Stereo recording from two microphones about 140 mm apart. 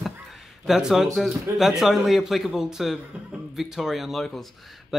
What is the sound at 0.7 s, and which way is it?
A man's voice, 5° right (ahead or behind).